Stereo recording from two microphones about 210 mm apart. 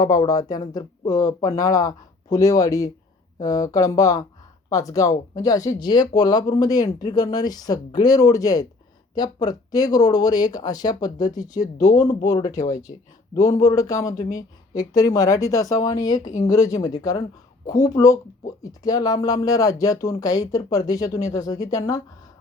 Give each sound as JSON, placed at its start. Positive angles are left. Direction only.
{"t": 0.0, "sound": "speech", "side_deg": 15}